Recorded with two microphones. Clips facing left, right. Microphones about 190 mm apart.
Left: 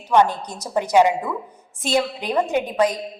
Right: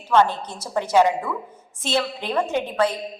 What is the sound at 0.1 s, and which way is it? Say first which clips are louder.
A woman's voice: left 1 dB; 15° left (ahead or behind).